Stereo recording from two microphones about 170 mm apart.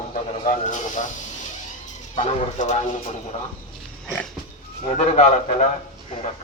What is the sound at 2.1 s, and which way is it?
Speech, 45° left (ahead or behind).